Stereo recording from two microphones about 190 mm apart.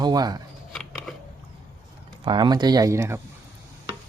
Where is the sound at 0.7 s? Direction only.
Centre (ahead or behind).